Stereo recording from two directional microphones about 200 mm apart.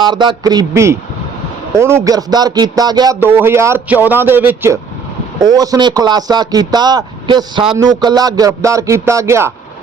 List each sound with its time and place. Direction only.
0.0 s a man's voice: 20° right (ahead or behind)
2.0 s a man's voice: 20° right (ahead or behind)
3.2 s a man's voice: 10° right (ahead or behind)